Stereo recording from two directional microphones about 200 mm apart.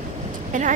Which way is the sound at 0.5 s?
40° right (ahead or behind).